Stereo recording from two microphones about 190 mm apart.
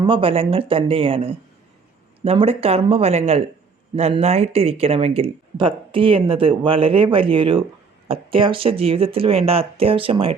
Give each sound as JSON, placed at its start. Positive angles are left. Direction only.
{"t": 0.0, "sound": "speech", "side_deg": -30}